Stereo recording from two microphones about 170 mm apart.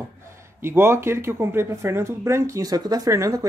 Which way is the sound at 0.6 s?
15° right (ahead or behind).